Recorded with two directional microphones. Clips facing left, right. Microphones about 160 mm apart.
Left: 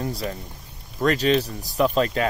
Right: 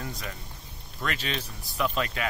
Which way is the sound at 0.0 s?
35° left (ahead or behind).